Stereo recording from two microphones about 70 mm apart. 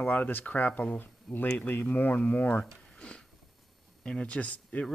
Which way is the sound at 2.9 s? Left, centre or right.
Centre.